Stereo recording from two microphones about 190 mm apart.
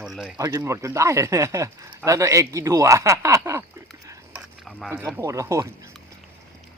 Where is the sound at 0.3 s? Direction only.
20° right (ahead or behind).